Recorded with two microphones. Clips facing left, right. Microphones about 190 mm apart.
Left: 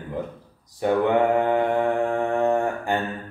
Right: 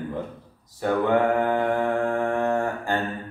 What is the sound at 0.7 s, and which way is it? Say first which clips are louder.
Mantra: left 2 dB; 20° left (ahead or behind).